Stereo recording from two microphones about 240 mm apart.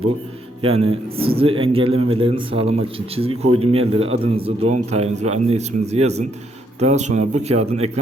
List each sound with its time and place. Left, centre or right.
0.6 s a man's voice: right